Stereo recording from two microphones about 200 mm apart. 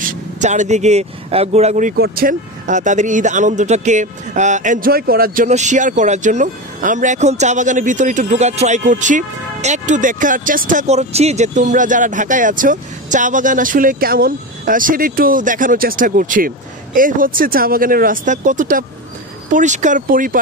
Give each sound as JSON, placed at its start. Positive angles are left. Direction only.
{"t": 0.4, "sound": "speech", "side_deg": -35}